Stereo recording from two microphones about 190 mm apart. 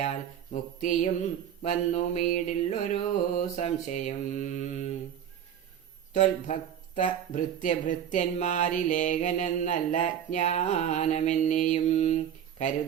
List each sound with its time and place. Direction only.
0.0 s mantra: 40° left (ahead or behind)
1.6 s speech: 40° left (ahead or behind)
6.1 s speech: 40° left (ahead or behind)